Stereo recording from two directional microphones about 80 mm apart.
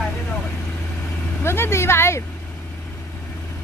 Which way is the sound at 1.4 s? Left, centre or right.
Left.